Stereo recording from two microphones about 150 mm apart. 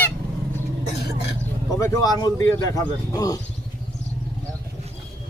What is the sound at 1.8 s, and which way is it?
Speech, 25° left (ahead or behind).